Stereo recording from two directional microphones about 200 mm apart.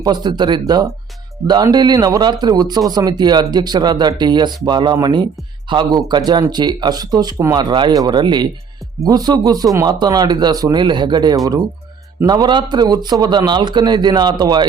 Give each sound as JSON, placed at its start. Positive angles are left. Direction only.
{"t": 0.0, "sound": "a man's voice", "side_deg": -20}